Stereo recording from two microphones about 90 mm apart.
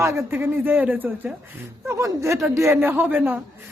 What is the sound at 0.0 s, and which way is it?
Speech, 30° right (ahead or behind).